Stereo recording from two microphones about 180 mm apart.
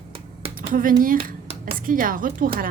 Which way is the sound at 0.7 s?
50° right (ahead or behind).